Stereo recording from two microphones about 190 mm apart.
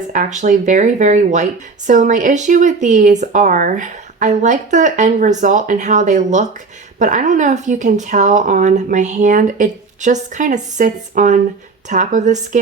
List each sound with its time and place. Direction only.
0.1 s speech: 40° right (ahead or behind)